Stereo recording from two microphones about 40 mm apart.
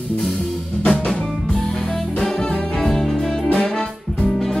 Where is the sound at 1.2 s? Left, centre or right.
Centre.